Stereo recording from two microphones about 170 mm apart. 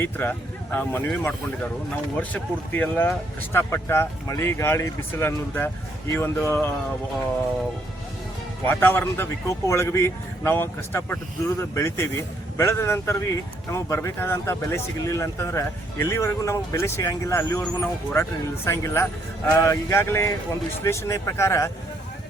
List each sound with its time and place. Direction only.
0.0 s speech: 10° left (ahead or behind)
8.6 s speech: 10° left (ahead or behind)